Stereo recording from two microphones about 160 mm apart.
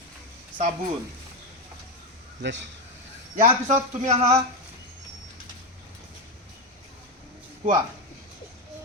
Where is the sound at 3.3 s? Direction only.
50° right (ahead or behind).